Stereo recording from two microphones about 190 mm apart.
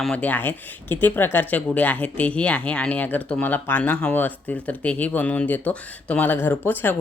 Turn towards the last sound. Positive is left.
turn(degrees=10)  # may be behind; listen again after turning